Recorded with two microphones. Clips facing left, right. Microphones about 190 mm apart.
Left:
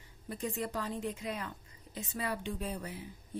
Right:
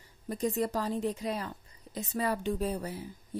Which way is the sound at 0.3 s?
40° right (ahead or behind).